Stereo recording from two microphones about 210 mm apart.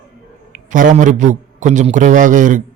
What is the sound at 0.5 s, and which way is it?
A man's voice, 40° right (ahead or behind).